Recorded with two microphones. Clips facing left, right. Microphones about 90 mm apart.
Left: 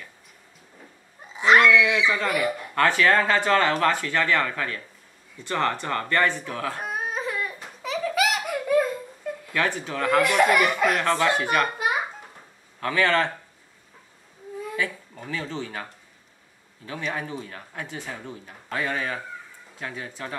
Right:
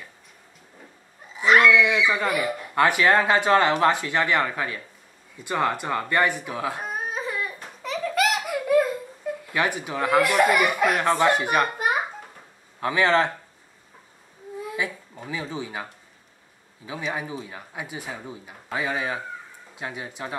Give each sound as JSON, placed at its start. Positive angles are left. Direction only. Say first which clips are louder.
{"t": 1.6, "sound": "speech", "louder": "even", "side_deg": -10}
{"t": 6.8, "sound": "crying", "louder": "left 1 dB", "side_deg": 0}
{"t": 9.5, "sound": "speech", "louder": "even", "side_deg": -15}
{"t": 12.8, "sound": "speech", "louder": "right 2 dB", "side_deg": -20}
{"t": 15.1, "sound": "speech", "louder": "even", "side_deg": -15}